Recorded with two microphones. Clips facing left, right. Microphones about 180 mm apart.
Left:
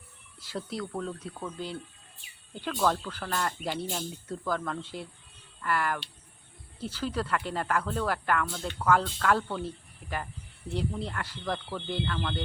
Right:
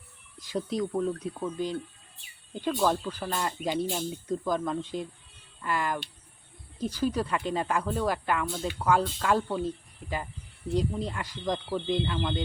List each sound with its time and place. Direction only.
0.3 s speech: 15° right (ahead or behind)